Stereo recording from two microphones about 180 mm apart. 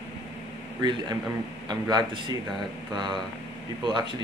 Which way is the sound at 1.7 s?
25° right (ahead or behind).